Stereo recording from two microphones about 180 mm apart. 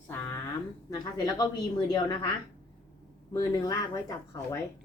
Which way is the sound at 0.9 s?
20° left (ahead or behind).